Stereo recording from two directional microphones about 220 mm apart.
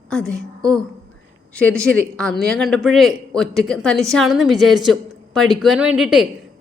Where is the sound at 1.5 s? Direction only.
5° left (ahead or behind).